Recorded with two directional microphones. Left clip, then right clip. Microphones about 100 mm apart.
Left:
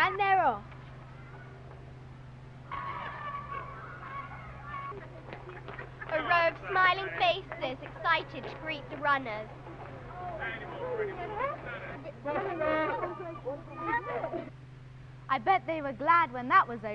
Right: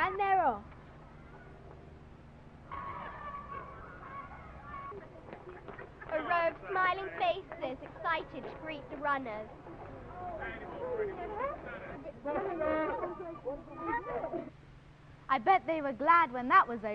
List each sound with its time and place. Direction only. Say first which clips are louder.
0.0 s a sound: left 3 dB; 25° right (ahead or behind)
2.7 s vehicle: left 4 dB; 25° right (ahead or behind)
15.2 s a man's voice: even; 25° right (ahead or behind)